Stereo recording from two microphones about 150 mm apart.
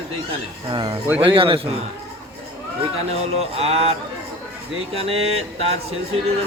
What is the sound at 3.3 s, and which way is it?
Speech, 40° right (ahead or behind).